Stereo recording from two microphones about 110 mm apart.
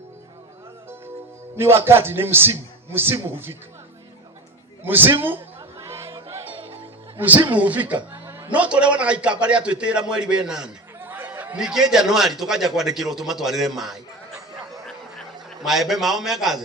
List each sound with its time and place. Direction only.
1.5 s a man's voice: 20° right (ahead or behind)
4.8 s a man's voice: 20° right (ahead or behind)
5.8 s music: 25° right (ahead or behind)
7.2 s a man's voice: 15° right (ahead or behind)
11.0 s a sound: 15° right (ahead or behind)
11.6 s a man's voice: 5° right (ahead or behind)
15.6 s a man's voice: 5° right (ahead or behind)